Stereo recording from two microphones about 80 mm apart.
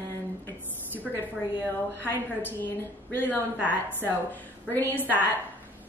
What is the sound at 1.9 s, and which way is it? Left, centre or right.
Speech, left.